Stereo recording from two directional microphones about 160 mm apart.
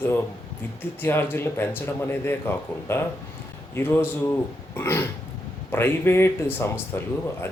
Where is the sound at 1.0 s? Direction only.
15° left (ahead or behind).